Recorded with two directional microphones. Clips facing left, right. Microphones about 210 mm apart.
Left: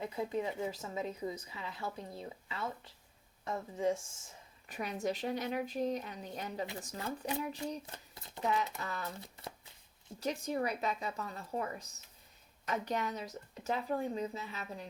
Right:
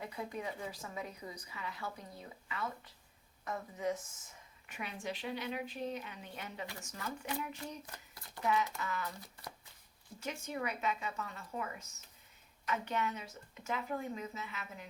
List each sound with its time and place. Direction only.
0.0 s a woman's voice: 25° left (ahead or behind)
8.8 s a woman's voice: 35° left (ahead or behind)